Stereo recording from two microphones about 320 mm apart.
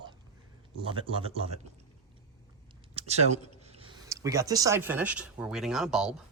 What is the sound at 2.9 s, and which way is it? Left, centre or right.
Speech, centre.